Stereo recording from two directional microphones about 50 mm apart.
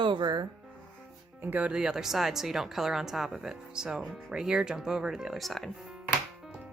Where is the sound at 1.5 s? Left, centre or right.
Right.